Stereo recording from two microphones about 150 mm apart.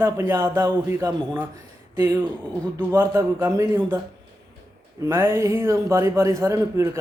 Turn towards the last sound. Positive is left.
turn(degrees=-20)  # may be behind; listen again after turning